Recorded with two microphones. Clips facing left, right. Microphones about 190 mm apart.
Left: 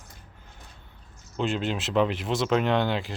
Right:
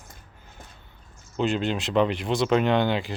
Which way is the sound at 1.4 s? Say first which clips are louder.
Right 3 dB; centre (ahead or behind).